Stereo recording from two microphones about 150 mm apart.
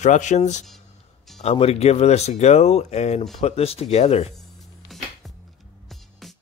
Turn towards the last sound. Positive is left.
turn(degrees=0)  # may be behind; listen again after turning